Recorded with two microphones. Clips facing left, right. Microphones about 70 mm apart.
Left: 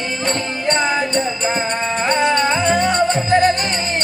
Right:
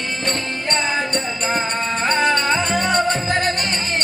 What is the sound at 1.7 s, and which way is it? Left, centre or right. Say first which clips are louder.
Music: left 2 dB; centre.